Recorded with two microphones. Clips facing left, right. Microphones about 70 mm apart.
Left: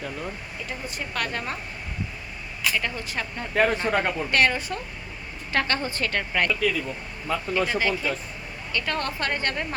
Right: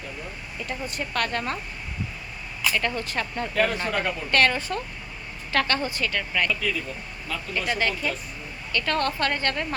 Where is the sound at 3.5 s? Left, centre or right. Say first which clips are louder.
Left 3 dB; left.